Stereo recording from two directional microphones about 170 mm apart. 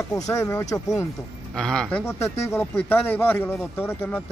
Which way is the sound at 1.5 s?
5° left (ahead or behind).